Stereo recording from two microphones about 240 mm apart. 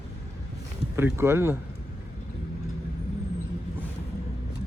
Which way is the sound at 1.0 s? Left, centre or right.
Centre.